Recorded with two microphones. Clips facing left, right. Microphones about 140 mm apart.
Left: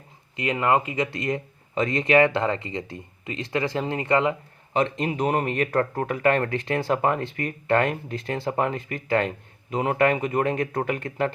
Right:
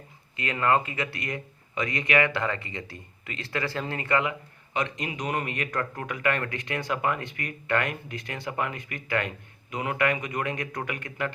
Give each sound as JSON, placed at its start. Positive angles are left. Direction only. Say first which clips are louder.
{"t": 0.3, "sound": "speech", "louder": "left 3 dB", "side_deg": 20}